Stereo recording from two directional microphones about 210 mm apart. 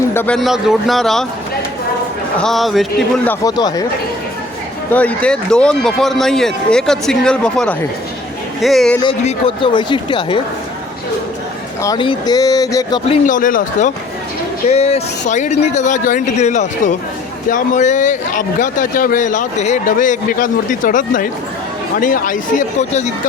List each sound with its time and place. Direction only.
0.1 s speech: 10° left (ahead or behind)
2.4 s speech: centre (ahead or behind)
3.2 s speech: 15° left (ahead or behind)
4.9 s speech: 5° left (ahead or behind)
9.0 s speech: 25° left (ahead or behind)
11.8 s speech: 20° left (ahead or behind)
13.1 s a man's voice: 40° left (ahead or behind)